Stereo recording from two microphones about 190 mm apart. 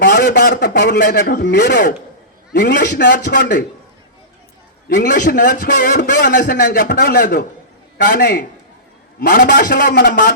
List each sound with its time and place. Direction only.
0.0 s a man's voice: 60° left (ahead or behind)
4.9 s a man's voice: 45° left (ahead or behind)
6.1 s a man's voice: 60° left (ahead or behind)
6.4 s a man's voice: 50° left (ahead or behind)